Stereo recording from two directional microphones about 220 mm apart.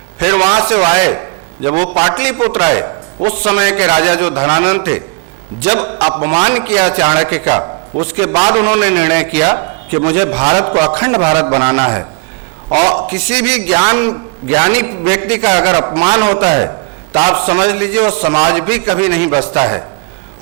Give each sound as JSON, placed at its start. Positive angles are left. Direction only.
{"t": 0.2, "sound": "a sound", "side_deg": -10}
{"t": 2.0, "sound": "a man's voice", "side_deg": -10}
{"t": 12.8, "sound": "a man's voice", "side_deg": -25}
{"t": 13.1, "sound": "a man's voice", "side_deg": -10}